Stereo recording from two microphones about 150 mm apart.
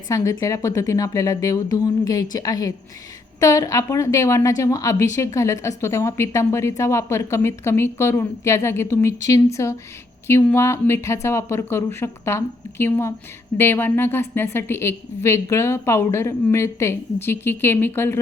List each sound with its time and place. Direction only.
0.1 s a woman's voice: 20° left (ahead or behind)